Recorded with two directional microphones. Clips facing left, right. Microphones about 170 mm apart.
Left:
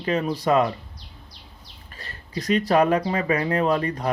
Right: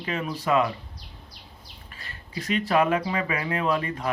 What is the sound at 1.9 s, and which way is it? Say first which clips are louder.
Speech: left 4 dB; 35° left (ahead or behind).